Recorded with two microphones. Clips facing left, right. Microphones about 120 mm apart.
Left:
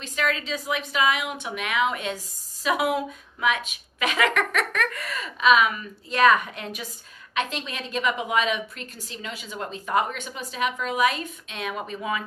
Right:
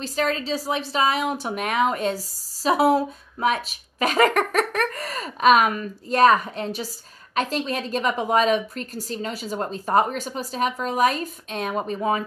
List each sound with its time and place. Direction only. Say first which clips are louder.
0.0 s a woman's voice: right 3 dB; 35° right (ahead or behind)